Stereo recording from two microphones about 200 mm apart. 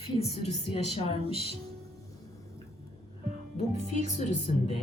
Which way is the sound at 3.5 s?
35° left (ahead or behind).